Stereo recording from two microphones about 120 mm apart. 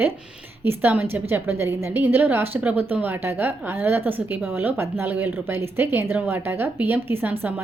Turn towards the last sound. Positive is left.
turn(degrees=-15)  # may be behind; listen again after turning